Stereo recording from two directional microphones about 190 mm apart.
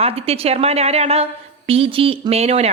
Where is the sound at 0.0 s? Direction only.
30° right (ahead or behind).